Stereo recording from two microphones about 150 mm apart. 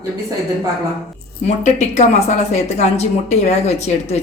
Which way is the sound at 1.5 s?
50° left (ahead or behind).